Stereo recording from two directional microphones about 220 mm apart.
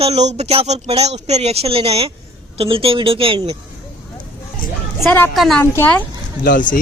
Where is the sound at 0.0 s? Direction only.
30° right (ahead or behind).